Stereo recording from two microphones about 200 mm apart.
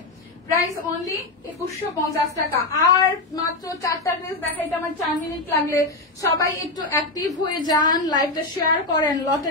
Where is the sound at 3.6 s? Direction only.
15° left (ahead or behind).